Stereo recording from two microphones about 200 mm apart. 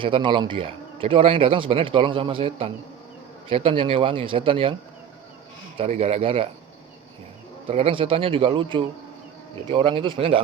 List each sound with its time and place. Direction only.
0.0 s speech: 25° right (ahead or behind)
5.7 s speech: 30° right (ahead or behind)
7.7 s speech: 30° right (ahead or behind)